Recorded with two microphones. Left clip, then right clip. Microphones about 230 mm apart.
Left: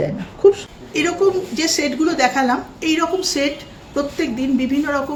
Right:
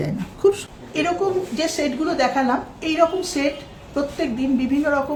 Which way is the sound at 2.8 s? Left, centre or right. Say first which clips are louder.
Even; centre.